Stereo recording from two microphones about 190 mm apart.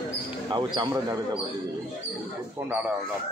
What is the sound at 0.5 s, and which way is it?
Speech, 20° right (ahead or behind).